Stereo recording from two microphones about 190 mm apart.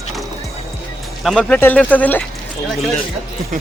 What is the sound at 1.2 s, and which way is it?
Speech, centre (ahead or behind).